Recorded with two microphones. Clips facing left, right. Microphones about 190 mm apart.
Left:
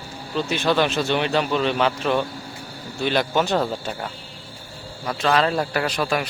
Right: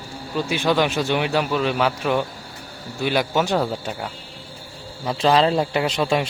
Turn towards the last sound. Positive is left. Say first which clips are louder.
# right 2 dB
turn(degrees=-25)  # may be behind; listen again after turning